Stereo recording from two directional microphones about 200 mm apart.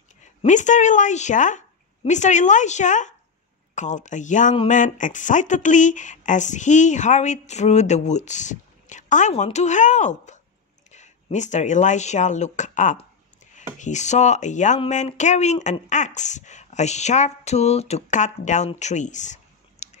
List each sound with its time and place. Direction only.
0.2 s speech: 35° left (ahead or behind)